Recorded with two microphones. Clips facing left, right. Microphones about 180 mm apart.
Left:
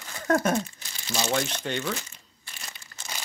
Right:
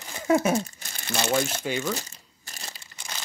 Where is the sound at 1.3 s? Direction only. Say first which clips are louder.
Right 3 dB; 5° right (ahead or behind).